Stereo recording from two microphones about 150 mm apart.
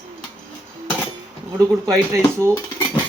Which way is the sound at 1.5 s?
20° right (ahead or behind).